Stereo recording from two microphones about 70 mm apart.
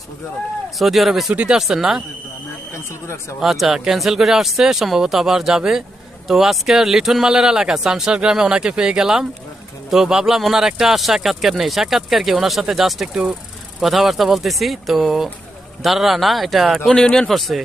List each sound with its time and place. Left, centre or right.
0.8 s speech: centre
1.3 s speech: centre
2.7 s speech: left
3.4 s speech: centre